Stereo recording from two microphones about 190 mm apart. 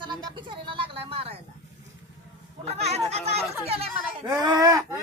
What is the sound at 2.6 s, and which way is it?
Speech, 35° right (ahead or behind).